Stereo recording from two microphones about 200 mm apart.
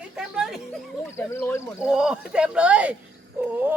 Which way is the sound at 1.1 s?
10° left (ahead or behind).